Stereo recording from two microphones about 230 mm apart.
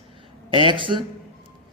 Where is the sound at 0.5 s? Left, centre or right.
Right.